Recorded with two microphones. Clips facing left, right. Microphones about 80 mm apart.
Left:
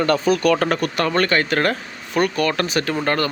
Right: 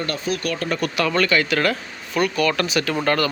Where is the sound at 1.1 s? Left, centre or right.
Left.